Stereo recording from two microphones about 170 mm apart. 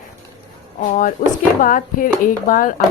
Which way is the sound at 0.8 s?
50° left (ahead or behind).